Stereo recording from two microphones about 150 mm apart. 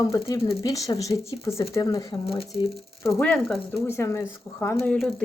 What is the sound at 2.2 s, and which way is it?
Speech, 40° left (ahead or behind).